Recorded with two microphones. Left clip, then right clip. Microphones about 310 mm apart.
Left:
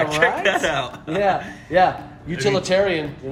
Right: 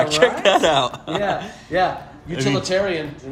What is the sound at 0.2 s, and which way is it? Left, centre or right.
Speech, centre.